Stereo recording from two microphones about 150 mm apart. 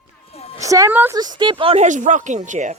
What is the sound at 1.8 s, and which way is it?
Speech, 55° right (ahead or behind).